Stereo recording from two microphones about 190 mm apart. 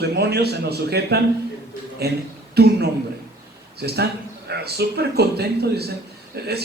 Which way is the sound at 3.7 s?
60° right (ahead or behind).